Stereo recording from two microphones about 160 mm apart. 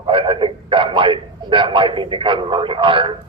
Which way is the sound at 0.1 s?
30° right (ahead or behind).